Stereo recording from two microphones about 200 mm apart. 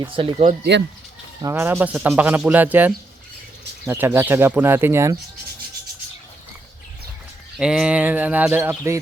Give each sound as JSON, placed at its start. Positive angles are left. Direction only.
{"t": 0.0, "sound": "speech", "side_deg": -25}
{"t": 0.7, "sound": "speech", "side_deg": -60}
{"t": 1.4, "sound": "speech", "side_deg": -15}
{"t": 7.6, "sound": "speech", "side_deg": -5}